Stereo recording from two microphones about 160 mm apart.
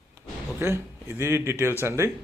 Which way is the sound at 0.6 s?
15° right (ahead or behind).